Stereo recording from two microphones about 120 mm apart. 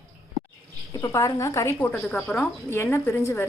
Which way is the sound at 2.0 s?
5° left (ahead or behind).